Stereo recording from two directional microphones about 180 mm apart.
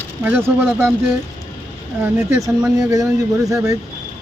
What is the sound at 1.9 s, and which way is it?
Speech, 10° right (ahead or behind).